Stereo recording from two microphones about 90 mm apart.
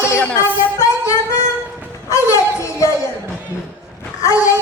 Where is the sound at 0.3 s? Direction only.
35° left (ahead or behind).